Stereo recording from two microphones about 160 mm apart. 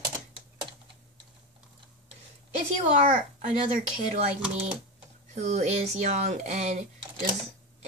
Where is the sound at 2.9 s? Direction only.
55° right (ahead or behind).